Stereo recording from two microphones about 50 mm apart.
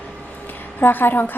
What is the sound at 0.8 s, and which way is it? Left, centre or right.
Speech, left.